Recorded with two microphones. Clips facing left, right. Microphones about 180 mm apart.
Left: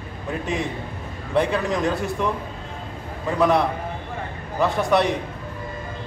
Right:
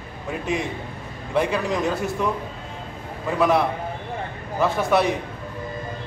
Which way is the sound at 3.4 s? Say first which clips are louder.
Left 1 dB; centre (ahead or behind).